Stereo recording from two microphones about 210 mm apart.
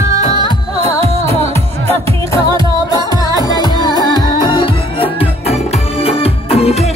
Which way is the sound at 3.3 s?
20° left (ahead or behind).